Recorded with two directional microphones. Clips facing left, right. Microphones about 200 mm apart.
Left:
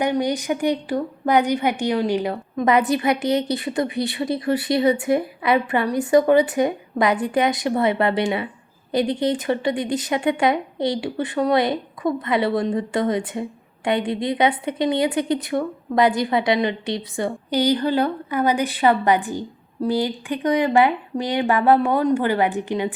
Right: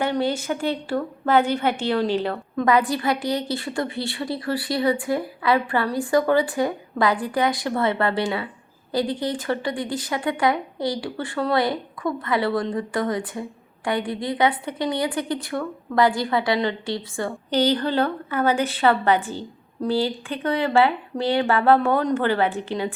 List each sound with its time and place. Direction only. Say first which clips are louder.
0.0 s a woman's voice: left 2 dB; 15° left (ahead or behind)